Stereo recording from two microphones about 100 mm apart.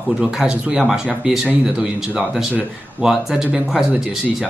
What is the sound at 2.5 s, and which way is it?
Speech, 15° right (ahead or behind).